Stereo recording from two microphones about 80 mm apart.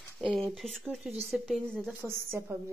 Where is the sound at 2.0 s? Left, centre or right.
Right.